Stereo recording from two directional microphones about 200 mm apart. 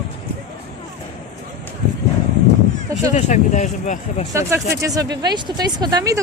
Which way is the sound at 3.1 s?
35° left (ahead or behind).